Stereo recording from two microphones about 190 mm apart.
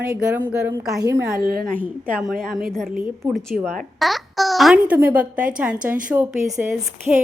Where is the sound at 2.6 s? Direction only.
Centre (ahead or behind).